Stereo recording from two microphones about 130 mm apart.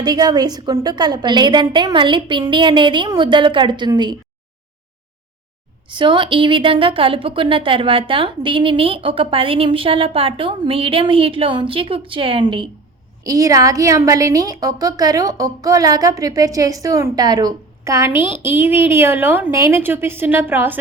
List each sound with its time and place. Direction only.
0.0 s a woman's voice: 30° right (ahead or behind)
5.9 s a woman's voice: 40° right (ahead or behind)
13.2 s a woman's voice: 25° right (ahead or behind)